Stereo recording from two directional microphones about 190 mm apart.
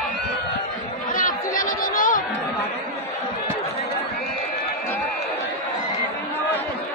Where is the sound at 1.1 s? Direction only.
45° left (ahead or behind).